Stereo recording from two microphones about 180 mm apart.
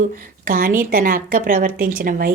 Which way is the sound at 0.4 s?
50° right (ahead or behind).